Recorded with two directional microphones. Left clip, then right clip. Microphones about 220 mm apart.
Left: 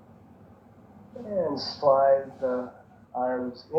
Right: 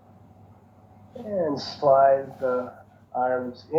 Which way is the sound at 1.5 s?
35° right (ahead or behind).